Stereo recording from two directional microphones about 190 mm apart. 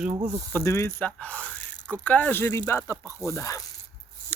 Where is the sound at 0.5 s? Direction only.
15° left (ahead or behind).